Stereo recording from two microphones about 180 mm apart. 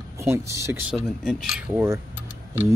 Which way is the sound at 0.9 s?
5° right (ahead or behind).